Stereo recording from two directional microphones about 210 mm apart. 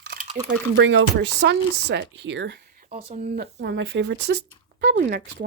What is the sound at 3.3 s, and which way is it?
Speech, 50° right (ahead or behind).